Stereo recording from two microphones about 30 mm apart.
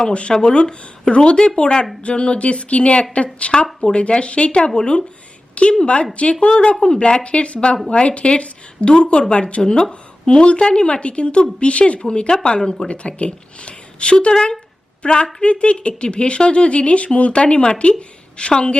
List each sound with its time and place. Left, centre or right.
0.0 s speech: left
12.9 s speech: left
18.3 s speech: left